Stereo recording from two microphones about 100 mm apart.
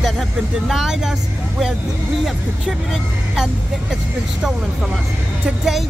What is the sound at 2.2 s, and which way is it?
Speech, centre (ahead or behind).